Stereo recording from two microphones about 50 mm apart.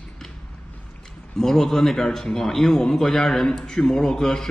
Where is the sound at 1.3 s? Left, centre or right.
Centre.